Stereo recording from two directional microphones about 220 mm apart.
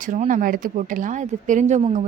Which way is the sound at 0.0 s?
35° right (ahead or behind).